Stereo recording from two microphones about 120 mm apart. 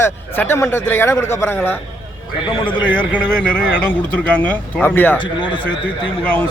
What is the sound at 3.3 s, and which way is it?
A man's voice, 10° left (ahead or behind).